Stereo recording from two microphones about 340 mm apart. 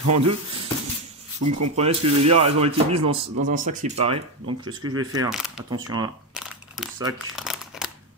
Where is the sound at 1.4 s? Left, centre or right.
Right.